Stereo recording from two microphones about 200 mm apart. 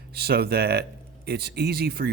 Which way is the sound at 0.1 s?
50° right (ahead or behind).